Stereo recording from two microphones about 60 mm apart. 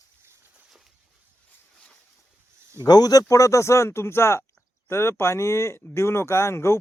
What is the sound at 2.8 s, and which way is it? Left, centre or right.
Speech, left.